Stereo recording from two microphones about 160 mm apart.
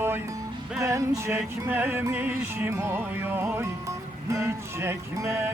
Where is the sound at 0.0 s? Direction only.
15° right (ahead or behind).